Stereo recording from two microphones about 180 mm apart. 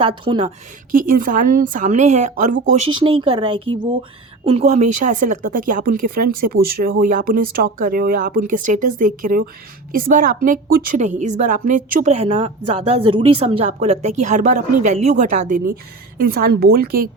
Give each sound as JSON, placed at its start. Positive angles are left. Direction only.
{"t": 0.0, "sound": "speech", "side_deg": -30}
{"t": 0.9, "sound": "a woman's voice", "side_deg": -50}
{"t": 4.7, "sound": "a woman's voice", "side_deg": -40}